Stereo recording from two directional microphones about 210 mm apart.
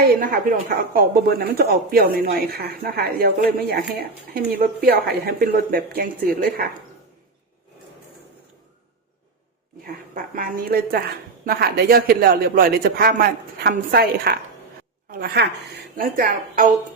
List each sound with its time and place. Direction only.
0.1 s a man's voice: 45° right (ahead or behind)
10.3 s a man's voice: 45° right (ahead or behind)